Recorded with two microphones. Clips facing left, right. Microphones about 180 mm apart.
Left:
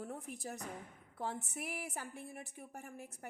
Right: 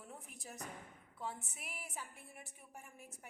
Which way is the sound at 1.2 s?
70° left (ahead or behind).